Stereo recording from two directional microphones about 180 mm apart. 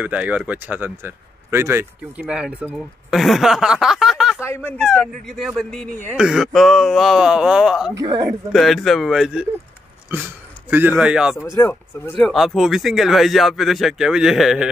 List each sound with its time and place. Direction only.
0.0 s speech: 10° right (ahead or behind)
4.4 s speech: 15° left (ahead or behind); by 7.9 s 5° right (ahead or behind)
7.9 s a woman's voice: 20° right (ahead or behind)
8.3 s speech: centre (ahead or behind)
10.7 s speech: 10° right (ahead or behind)
11.5 s speech: 15° left (ahead or behind)
12.2 s speech: centre (ahead or behind)